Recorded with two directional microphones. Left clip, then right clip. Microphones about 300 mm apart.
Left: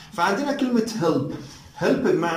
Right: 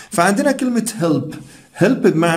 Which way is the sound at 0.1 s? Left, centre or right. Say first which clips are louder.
Right 7 dB; right.